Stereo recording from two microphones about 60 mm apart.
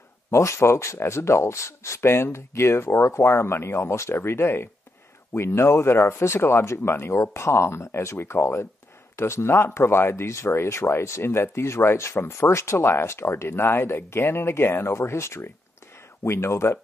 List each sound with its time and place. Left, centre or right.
0.3 s speech: left